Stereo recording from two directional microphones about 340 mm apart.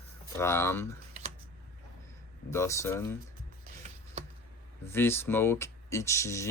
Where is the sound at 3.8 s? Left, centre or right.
Centre.